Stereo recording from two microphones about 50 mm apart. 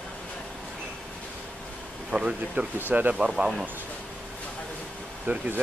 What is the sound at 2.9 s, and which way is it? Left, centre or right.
Speech, right.